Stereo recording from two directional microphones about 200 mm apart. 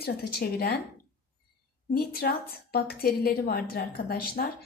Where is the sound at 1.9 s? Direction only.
50° left (ahead or behind).